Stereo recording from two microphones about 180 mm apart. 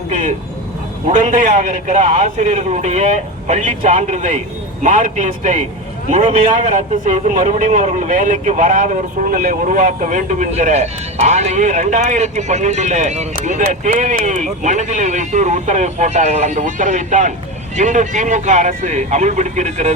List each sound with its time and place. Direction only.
1.0 s a man's voice: 45° right (ahead or behind)